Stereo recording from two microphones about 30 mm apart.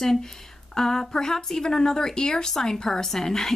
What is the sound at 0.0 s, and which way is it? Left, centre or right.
A woman's voice, centre.